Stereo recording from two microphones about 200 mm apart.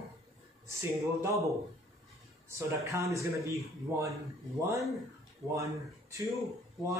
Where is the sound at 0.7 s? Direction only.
15° right (ahead or behind).